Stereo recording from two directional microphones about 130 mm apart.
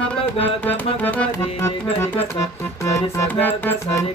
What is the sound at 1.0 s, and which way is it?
Music, 15° left (ahead or behind).